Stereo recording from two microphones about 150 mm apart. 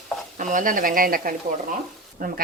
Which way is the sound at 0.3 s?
60° right (ahead or behind).